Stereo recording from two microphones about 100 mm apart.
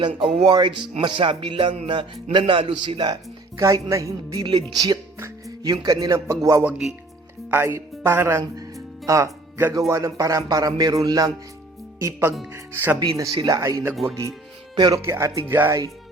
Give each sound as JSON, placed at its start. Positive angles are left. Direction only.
{"t": 0.1, "sound": "speech", "side_deg": -65}
{"t": 0.5, "sound": "speech", "side_deg": -50}
{"t": 1.9, "sound": "speech", "side_deg": -55}
{"t": 3.6, "sound": "speech", "side_deg": -30}
{"t": 4.4, "sound": "speech", "side_deg": -45}
{"t": 6.7, "sound": "speech", "side_deg": -10}
{"t": 7.5, "sound": "speech", "side_deg": -25}
{"t": 13.0, "sound": "speech", "side_deg": -40}
{"t": 13.6, "sound": "speech", "side_deg": -30}
{"t": 14.8, "sound": "speech", "side_deg": -45}
{"t": 15.0, "sound": "speech", "side_deg": -25}